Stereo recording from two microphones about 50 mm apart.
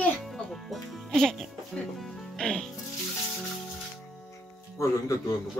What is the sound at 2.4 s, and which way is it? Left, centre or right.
Music, centre.